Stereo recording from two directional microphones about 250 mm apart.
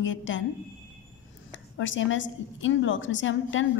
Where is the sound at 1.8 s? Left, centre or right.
Left.